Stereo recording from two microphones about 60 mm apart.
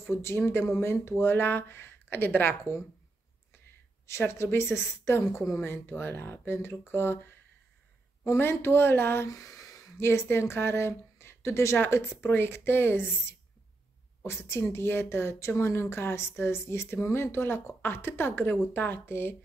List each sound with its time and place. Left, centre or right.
0.0 s speech: left
4.3 s speech: left
8.3 s speech: left
9.3 s a sound: left
9.9 s speech: left